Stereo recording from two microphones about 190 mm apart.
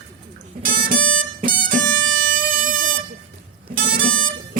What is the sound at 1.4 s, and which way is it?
Music, 50° right (ahead or behind).